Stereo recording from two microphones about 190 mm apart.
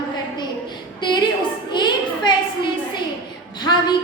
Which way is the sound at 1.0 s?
25° left (ahead or behind).